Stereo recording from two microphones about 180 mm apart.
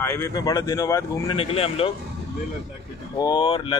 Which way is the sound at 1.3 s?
35° left (ahead or behind).